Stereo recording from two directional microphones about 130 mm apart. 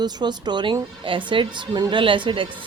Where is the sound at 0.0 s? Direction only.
35° right (ahead or behind).